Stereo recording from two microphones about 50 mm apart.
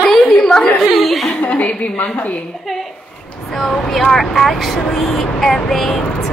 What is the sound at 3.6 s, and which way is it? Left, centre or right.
A woman's voice, centre.